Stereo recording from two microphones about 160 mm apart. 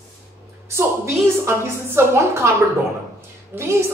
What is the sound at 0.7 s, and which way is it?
A woman's voice, 15° right (ahead or behind).